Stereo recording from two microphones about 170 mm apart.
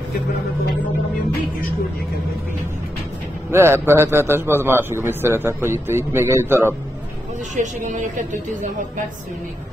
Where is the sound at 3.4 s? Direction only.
15° right (ahead or behind).